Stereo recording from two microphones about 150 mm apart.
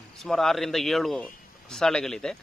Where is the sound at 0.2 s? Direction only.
Centre (ahead or behind).